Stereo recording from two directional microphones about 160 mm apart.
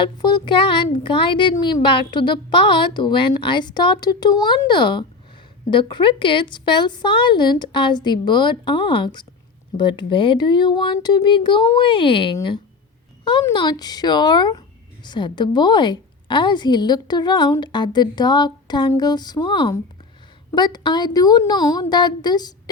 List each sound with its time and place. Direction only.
0.0 s a woman's voice: 25° left (ahead or behind)